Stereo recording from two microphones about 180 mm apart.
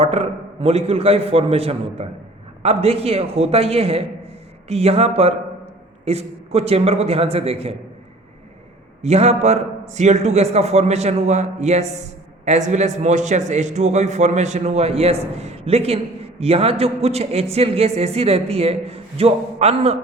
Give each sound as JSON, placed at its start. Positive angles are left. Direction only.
{"t": 0.0, "sound": "a man's voice", "side_deg": -35}
{"t": 9.0, "sound": "a man's voice", "side_deg": -35}